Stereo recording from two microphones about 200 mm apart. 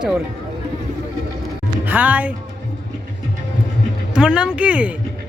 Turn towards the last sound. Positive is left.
turn(degrees=-5)  # may be behind; listen again after turning